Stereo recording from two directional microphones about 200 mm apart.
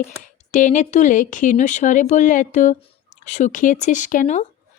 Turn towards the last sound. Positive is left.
turn(degrees=40)  # may be behind; listen again after turning